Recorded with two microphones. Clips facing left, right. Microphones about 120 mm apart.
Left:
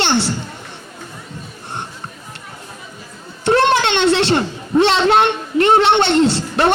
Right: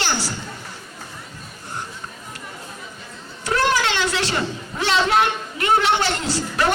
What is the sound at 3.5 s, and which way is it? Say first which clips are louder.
A woman's voice: left 6 dB; 25° left (ahead or behind).